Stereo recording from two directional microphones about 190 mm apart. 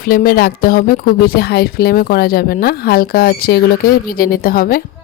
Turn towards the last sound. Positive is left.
turn(degrees=50)  # may be behind; listen again after turning